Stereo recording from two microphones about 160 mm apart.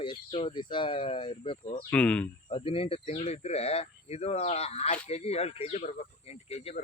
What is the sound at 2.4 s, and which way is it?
Speech, 35° left (ahead or behind).